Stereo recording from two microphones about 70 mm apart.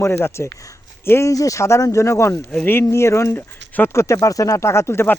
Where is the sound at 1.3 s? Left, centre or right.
Left.